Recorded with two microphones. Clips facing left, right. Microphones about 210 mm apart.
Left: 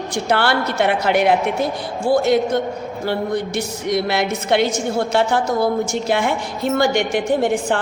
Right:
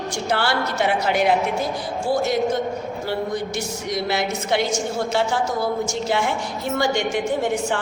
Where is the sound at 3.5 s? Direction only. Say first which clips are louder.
Left 5 dB; 60° left (ahead or behind).